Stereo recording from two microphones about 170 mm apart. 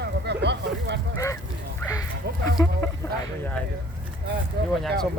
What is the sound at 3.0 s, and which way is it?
Speech, 15° left (ahead or behind).